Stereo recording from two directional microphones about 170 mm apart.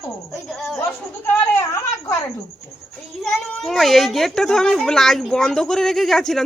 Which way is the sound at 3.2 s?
Centre (ahead or behind).